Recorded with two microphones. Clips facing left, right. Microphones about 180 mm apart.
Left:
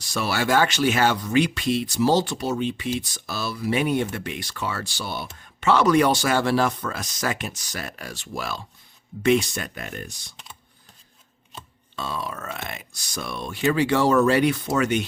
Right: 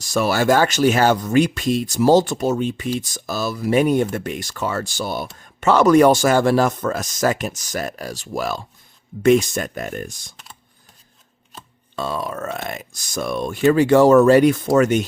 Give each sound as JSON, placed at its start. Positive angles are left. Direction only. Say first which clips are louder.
{"t": 0.0, "sound": "speech", "louder": "right 7 dB", "side_deg": -45}
{"t": 11.9, "sound": "speech", "louder": "right 6 dB", "side_deg": -50}